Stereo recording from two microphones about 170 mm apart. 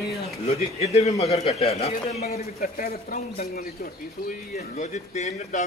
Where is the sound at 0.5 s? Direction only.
40° left (ahead or behind).